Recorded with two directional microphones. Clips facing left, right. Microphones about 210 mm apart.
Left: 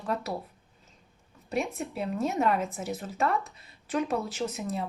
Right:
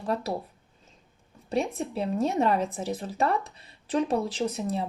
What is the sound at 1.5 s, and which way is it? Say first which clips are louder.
Speech: right 3 dB; 30° right (ahead or behind).